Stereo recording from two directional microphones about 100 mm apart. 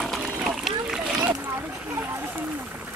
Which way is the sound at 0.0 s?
Centre (ahead or behind).